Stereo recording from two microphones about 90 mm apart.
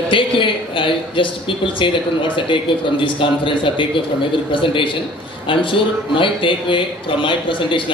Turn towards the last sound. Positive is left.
turn(degrees=70)  # may be behind; listen again after turning